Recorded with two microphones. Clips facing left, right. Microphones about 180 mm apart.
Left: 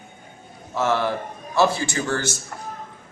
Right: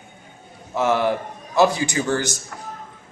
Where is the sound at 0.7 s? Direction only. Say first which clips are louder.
Right 2 dB; 15° right (ahead or behind).